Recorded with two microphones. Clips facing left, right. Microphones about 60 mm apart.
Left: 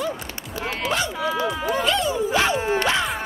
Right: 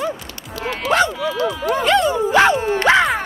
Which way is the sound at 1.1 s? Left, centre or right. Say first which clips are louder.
Right 2 dB; left.